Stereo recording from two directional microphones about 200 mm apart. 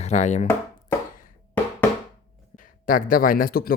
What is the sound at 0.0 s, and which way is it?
Chopping, 35° left (ahead or behind).